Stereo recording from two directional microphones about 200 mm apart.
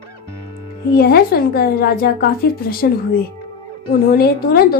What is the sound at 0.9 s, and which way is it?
A woman's voice, 50° left (ahead or behind).